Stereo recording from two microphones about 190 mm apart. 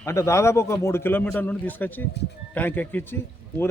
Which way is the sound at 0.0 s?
15° left (ahead or behind).